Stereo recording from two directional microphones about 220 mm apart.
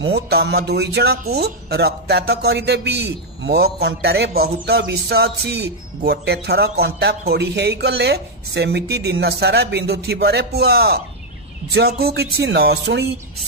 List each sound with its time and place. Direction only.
0.1 s a man's voice: 45° right (ahead or behind)